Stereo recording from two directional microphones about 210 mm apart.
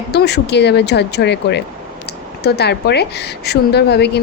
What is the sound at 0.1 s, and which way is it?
A woman's voice, 50° left (ahead or behind).